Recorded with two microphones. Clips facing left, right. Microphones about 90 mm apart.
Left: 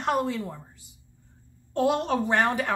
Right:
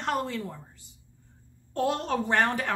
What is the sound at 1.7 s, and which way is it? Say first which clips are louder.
Speech: left 3 dB; 15° left (ahead or behind).